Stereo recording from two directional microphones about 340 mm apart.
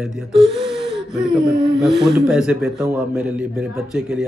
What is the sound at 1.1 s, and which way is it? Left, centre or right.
A man's voice, centre.